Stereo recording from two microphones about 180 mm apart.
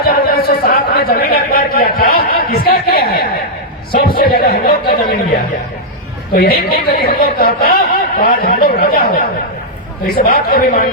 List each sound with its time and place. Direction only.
0.0 s a sound: 55° left (ahead or behind)
6.3 s speech: 60° left (ahead or behind)
10.1 s speech: 55° left (ahead or behind)